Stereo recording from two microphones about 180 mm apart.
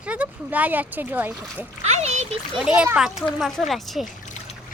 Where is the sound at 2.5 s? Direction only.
5° right (ahead or behind).